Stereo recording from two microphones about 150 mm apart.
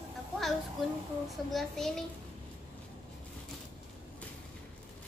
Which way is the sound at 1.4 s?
Centre (ahead or behind).